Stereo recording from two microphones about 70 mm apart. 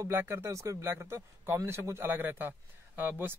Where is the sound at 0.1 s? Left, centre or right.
Right.